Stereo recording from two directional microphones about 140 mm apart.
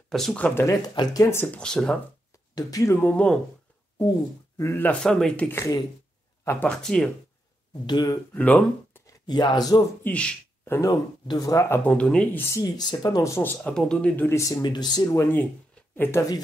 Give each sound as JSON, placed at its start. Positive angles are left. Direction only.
{"t": 0.1, "sound": "speech", "side_deg": 5}
{"t": 0.6, "sound": "speech", "side_deg": 20}
{"t": 2.5, "sound": "speech", "side_deg": 25}
{"t": 3.0, "sound": "speech", "side_deg": 10}
{"t": 4.6, "sound": "speech", "side_deg": 15}
{"t": 7.8, "sound": "speech", "side_deg": 30}
{"t": 8.3, "sound": "speech", "side_deg": 10}
{"t": 9.3, "sound": "speech", "side_deg": 30}
{"t": 10.0, "sound": "speech", "side_deg": 10}
{"t": 10.9, "sound": "speech", "side_deg": 25}
{"t": 11.8, "sound": "speech", "side_deg": 10}
{"t": 12.4, "sound": "speech", "side_deg": 20}
{"t": 13.7, "sound": "speech", "side_deg": 5}
{"t": 14.6, "sound": "speech", "side_deg": 30}